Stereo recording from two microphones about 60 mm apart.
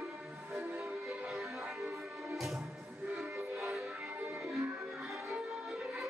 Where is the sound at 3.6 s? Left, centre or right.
Centre.